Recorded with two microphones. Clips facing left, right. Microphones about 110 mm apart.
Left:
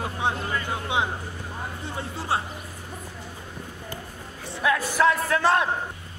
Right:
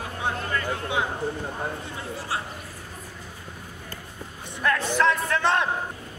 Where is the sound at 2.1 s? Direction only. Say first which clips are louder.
Left 5 dB; 25° left (ahead or behind).